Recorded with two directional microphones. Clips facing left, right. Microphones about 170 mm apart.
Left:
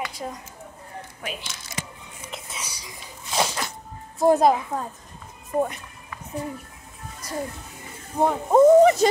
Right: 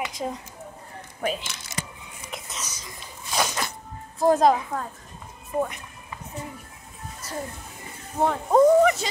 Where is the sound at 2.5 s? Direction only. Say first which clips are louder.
Even; 10° left (ahead or behind).